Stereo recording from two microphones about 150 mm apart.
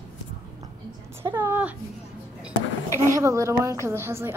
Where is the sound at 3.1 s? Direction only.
20° right (ahead or behind).